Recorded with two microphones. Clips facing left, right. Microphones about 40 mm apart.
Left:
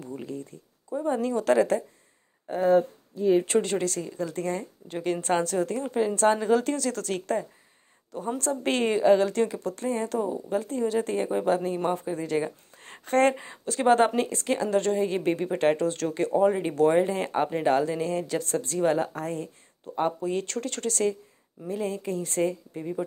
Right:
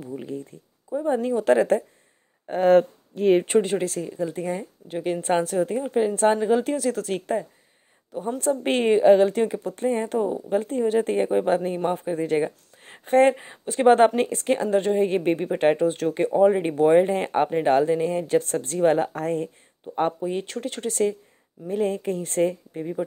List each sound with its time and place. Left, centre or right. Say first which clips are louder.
0.0 s a sound: right 3 dB; centre
0.3 s a sound: right 3 dB; right
1.0 s speech: right 3 dB; right
2.7 s speech: right 5 dB; right
3.5 s speech: right 3 dB; centre
8.4 s speech: right 4 dB; right
9.8 s speech: right 5 dB; right
12.7 s a sound: even; centre
13.0 s speech: right 4 dB; centre
13.8 s speech: right 5 dB; right
17.1 s speech: right 4 dB; right
20.1 s speech: right 1 dB; right
21.6 s speech: right 5 dB; right
22.4 s speech: right 5 dB; right